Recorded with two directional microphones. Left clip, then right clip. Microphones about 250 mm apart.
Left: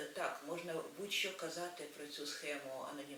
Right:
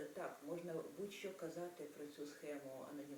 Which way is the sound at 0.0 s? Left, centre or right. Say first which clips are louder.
Left 7 dB; centre.